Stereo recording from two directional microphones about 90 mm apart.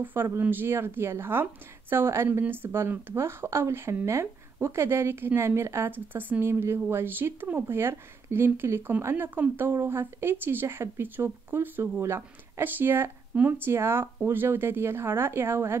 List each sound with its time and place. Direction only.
0.0 s speech: 25° right (ahead or behind)